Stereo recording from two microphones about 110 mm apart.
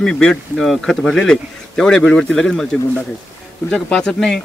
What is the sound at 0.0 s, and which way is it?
Speech, 5° left (ahead or behind).